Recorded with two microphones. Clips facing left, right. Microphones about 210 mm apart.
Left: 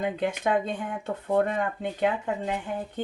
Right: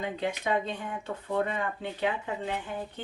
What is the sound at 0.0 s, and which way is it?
Speech, 50° left (ahead or behind).